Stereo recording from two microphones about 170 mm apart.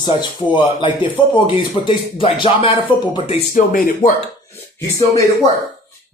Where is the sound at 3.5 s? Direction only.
50° left (ahead or behind).